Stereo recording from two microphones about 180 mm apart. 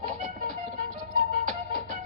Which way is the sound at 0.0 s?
45° right (ahead or behind).